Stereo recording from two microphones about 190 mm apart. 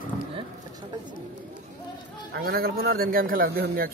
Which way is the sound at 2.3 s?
55° right (ahead or behind).